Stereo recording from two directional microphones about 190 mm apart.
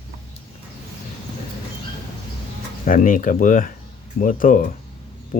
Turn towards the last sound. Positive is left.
turn(degrees=45)  # may be behind; listen again after turning